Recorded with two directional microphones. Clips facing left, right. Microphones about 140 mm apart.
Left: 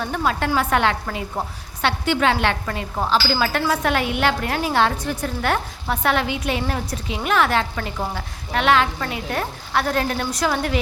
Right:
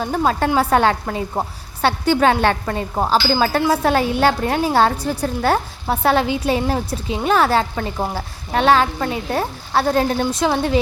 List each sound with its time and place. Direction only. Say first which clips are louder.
0.0 s a woman's voice: right 4 dB; 30° right (ahead or behind)